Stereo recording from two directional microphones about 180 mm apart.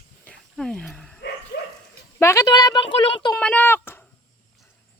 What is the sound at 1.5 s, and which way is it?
Dog, 60° left (ahead or behind).